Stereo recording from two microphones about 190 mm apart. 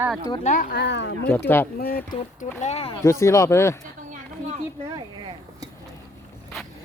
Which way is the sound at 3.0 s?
15° left (ahead or behind).